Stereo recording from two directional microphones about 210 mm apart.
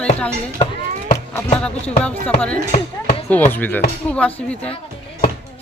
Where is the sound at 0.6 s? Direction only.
30° left (ahead or behind).